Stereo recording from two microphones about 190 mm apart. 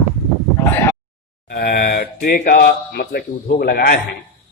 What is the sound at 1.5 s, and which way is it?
Speech, 55° left (ahead or behind).